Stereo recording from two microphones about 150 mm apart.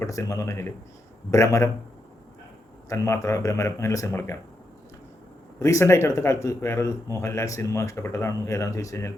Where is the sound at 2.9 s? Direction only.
20° left (ahead or behind).